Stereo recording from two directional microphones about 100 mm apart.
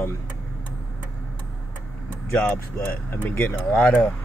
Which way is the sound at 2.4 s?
15° left (ahead or behind).